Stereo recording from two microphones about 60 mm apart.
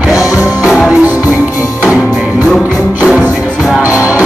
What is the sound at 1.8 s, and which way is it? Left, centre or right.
Music, centre.